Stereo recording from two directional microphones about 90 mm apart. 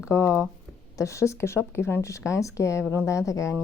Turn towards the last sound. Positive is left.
turn(degrees=35)  # may be behind; listen again after turning